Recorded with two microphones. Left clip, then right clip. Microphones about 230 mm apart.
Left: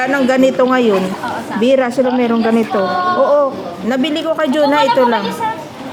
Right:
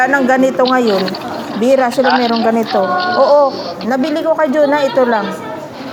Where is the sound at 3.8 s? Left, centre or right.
Centre.